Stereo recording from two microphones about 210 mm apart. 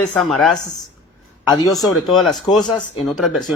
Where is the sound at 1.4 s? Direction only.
15° left (ahead or behind).